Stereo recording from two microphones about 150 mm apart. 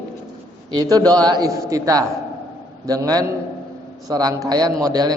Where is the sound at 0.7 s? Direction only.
25° right (ahead or behind).